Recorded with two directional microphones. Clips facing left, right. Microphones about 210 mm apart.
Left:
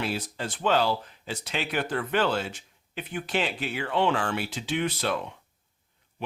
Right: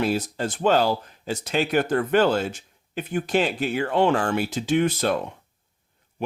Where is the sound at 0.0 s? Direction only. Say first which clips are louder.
Right 7 dB; 45° right (ahead or behind).